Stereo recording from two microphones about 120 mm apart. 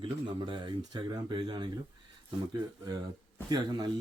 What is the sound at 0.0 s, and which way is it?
Speech, 45° right (ahead or behind).